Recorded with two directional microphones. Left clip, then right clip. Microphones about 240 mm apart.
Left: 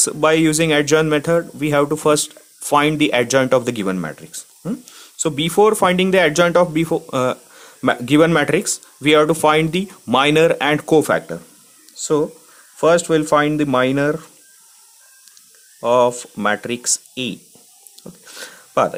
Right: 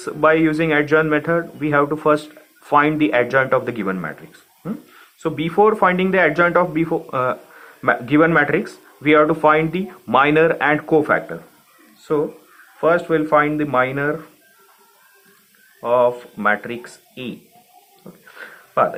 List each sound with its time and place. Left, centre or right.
0.0 s speech: left
12.8 s speech: left
15.8 s speech: left
18.3 s a sound: left